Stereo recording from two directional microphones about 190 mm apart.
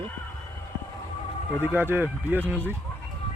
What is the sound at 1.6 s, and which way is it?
Speech, 10° right (ahead or behind).